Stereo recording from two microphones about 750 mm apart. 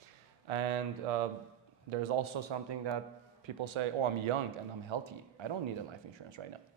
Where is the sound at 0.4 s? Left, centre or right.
Right.